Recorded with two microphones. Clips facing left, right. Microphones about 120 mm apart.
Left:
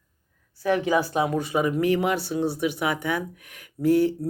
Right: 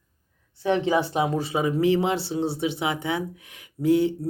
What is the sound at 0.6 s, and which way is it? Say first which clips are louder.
Speech: even; 25° right (ahead or behind).